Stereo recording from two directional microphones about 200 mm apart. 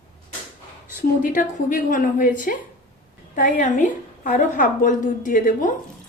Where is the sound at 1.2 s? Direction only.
45° left (ahead or behind).